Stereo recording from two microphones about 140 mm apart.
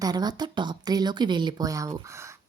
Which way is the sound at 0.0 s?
30° right (ahead or behind).